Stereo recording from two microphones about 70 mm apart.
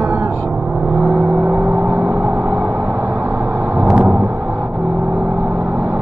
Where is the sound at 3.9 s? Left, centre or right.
Right.